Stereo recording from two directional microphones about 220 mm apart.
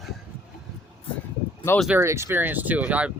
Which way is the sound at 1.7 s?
Centre (ahead or behind).